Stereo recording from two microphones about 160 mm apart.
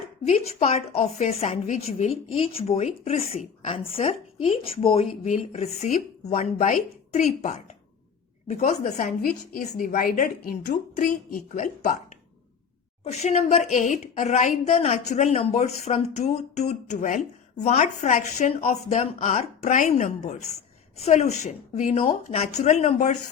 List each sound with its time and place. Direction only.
0.3 s a woman's voice: 40° left (ahead or behind)
13.1 s a woman's voice: 45° left (ahead or behind)